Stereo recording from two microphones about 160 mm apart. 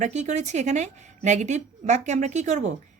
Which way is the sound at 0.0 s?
45° right (ahead or behind).